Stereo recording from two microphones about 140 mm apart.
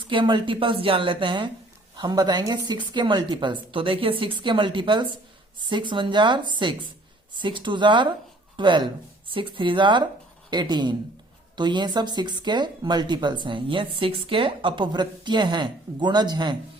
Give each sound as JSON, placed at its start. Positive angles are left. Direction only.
{"t": 0.0, "sound": "speech", "side_deg": -35}